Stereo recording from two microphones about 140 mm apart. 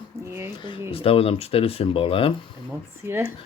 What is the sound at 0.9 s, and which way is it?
Speech, 45° left (ahead or behind).